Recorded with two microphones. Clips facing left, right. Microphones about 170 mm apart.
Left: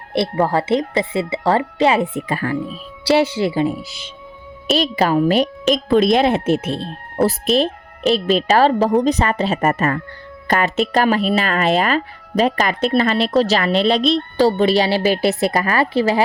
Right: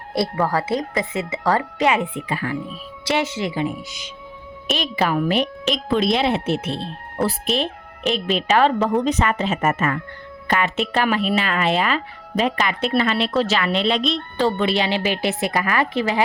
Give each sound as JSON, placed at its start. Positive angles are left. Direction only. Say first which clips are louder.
{"t": 0.1, "sound": "speech", "louder": "left 3 dB", "side_deg": 25}
{"t": 3.0, "sound": "speech", "louder": "left 7 dB", "side_deg": 30}